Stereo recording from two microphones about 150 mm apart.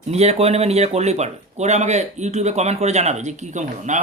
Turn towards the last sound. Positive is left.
turn(degrees=-55)  # may be behind; listen again after turning